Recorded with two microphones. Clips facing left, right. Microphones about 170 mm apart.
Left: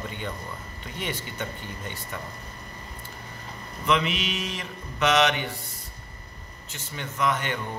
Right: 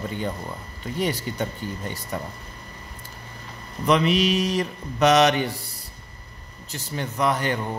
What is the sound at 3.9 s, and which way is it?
A man's voice, 40° right (ahead or behind).